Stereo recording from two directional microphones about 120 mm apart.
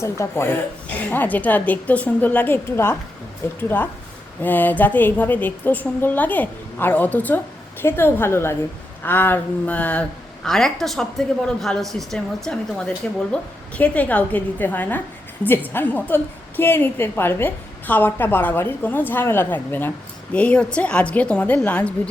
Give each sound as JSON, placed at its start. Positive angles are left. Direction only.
{"t": 0.0, "sound": "a woman's voice", "side_deg": 20}